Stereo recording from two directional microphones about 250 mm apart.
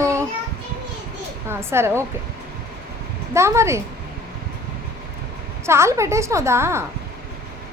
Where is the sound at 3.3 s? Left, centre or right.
Centre.